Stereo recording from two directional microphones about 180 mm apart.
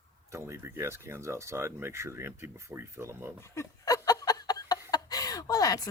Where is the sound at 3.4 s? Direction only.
15° left (ahead or behind).